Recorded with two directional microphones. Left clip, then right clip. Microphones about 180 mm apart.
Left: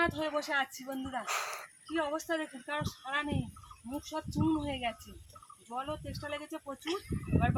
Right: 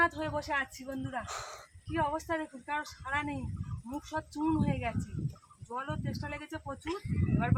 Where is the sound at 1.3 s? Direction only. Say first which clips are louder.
Left 6 dB; centre (ahead or behind).